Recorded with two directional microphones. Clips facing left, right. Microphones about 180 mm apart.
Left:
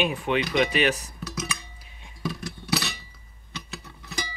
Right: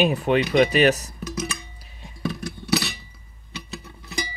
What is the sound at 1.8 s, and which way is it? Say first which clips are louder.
Dishes: right 5 dB; 40° right (ahead or behind).